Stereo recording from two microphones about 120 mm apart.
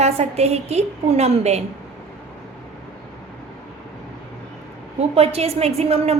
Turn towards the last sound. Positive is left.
turn(degrees=-60)  # may be behind; listen again after turning